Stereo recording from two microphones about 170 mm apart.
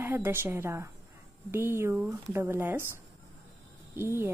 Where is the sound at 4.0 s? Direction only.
15° right (ahead or behind).